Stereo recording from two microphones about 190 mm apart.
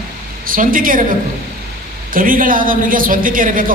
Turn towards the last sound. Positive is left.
turn(degrees=-45)  # may be behind; listen again after turning